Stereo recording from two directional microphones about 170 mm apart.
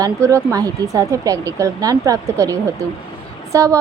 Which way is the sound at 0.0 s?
15° right (ahead or behind).